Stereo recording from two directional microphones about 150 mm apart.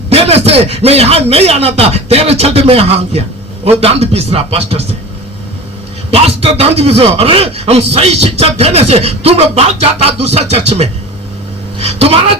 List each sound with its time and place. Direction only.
0.1 s a man's voice: 45° right (ahead or behind)
6.1 s a man's voice: 40° right (ahead or behind)